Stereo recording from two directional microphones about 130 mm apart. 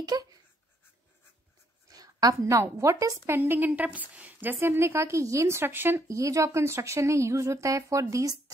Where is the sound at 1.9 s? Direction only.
30° right (ahead or behind).